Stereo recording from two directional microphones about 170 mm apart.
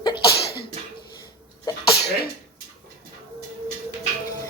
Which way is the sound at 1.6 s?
30° left (ahead or behind).